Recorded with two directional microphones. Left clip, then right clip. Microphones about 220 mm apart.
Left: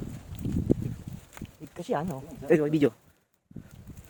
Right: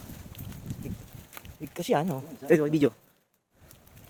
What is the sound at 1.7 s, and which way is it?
Speech, 40° right (ahead or behind).